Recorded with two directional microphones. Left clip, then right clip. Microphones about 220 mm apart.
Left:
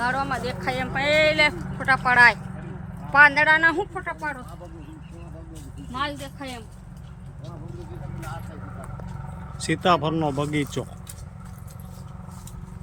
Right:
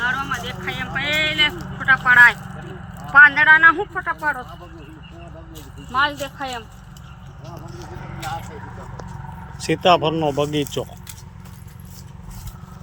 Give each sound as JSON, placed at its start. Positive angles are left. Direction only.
{"t": 0.0, "sound": "speech", "side_deg": 20}
{"t": 6.1, "sound": "speech", "side_deg": -45}
{"t": 9.6, "sound": "speech", "side_deg": 5}